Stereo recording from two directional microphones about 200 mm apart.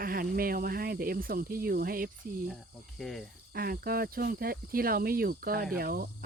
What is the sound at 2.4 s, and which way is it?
Speech, centre (ahead or behind).